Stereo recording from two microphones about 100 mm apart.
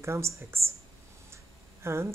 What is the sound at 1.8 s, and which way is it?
Speech, 25° right (ahead or behind).